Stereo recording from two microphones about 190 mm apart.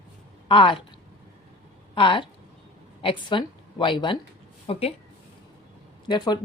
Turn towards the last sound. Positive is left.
turn(degrees=25)  # may be behind; listen again after turning